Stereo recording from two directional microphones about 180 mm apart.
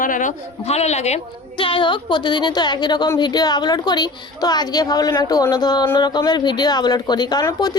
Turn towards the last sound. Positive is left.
turn(degrees=20)  # may be behind; listen again after turning